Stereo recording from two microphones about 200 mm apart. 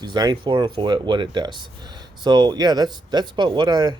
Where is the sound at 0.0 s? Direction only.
20° right (ahead or behind).